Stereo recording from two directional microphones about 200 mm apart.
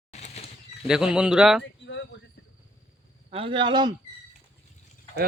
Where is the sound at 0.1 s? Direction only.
35° left (ahead or behind).